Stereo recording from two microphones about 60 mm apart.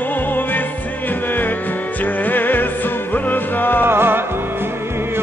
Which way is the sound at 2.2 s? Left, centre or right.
Left.